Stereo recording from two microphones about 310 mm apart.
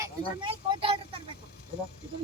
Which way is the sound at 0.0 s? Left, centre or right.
Centre.